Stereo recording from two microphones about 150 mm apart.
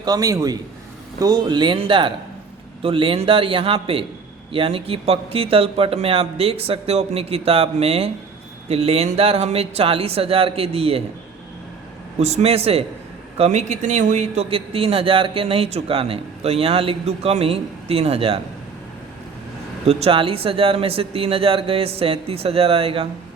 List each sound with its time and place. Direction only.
0.0 s a man's voice: 25° right (ahead or behind); by 11.0 s 40° right (ahead or behind)
12.2 s a man's voice: 45° right (ahead or behind)
19.8 s speech: 45° right (ahead or behind)